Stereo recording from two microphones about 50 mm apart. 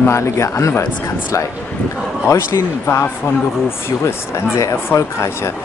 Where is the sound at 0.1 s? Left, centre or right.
Left.